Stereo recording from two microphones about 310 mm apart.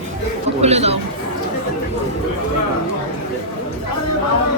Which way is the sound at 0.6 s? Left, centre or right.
Right.